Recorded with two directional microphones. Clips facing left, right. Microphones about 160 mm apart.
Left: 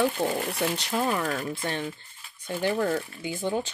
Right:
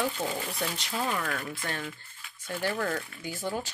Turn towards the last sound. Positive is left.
turn(degrees=20)  # may be behind; listen again after turning